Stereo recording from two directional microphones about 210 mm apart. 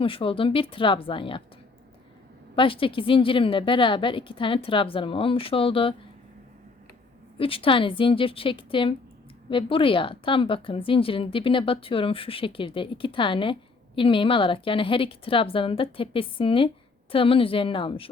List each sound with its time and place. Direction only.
0.0 s a woman's voice: 25° left (ahead or behind)
2.6 s a woman's voice: 25° left (ahead or behind)
7.3 s a woman's voice: 25° left (ahead or behind)